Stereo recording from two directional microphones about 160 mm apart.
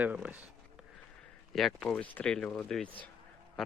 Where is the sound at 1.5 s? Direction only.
5° left (ahead or behind).